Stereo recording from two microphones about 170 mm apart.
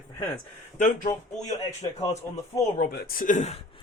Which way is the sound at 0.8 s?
50° left (ahead or behind).